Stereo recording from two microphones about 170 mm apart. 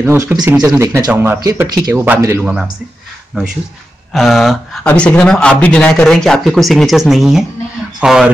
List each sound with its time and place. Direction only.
0.0 s speech: 15° right (ahead or behind)
1.4 s speech: 20° right (ahead or behind)
4.1 s speech: centre (ahead or behind)